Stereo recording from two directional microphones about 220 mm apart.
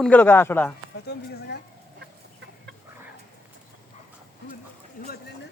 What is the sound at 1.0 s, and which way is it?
Speech, 50° left (ahead or behind).